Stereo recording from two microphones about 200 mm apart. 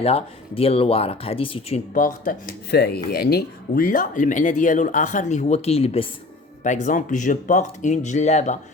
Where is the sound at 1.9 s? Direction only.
40° left (ahead or behind).